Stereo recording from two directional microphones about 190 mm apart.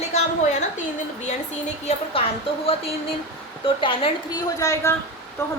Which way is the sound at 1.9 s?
30° left (ahead or behind).